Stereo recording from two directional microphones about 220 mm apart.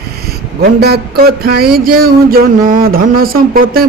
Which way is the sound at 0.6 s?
45° right (ahead or behind).